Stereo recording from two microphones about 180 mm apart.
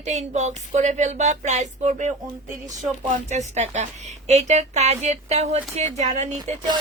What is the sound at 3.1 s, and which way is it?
A woman's voice, 40° right (ahead or behind).